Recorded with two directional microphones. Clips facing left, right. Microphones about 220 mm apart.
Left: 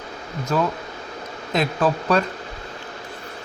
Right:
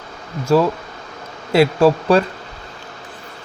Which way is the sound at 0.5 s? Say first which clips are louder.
Right 8 dB; 30° right (ahead or behind).